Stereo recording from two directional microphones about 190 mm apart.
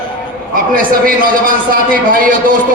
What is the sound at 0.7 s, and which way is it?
A man's voice, 45° right (ahead or behind).